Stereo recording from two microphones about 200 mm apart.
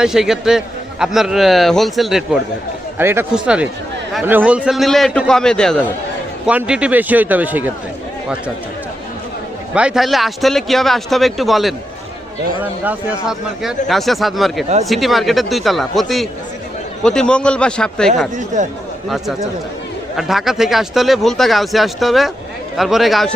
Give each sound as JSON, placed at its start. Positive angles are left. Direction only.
{"t": 0.0, "sound": "a man's voice", "side_deg": 0}
{"t": 3.0, "sound": "a man's voice", "side_deg": -10}
{"t": 9.7, "sound": "a man's voice", "side_deg": -5}
{"t": 12.8, "sound": "a man's voice", "side_deg": -5}
{"t": 18.3, "sound": "speech", "side_deg": -40}
{"t": 20.1, "sound": "a man's voice", "side_deg": 0}